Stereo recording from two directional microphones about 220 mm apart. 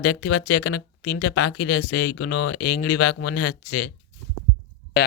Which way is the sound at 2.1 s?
50° left (ahead or behind).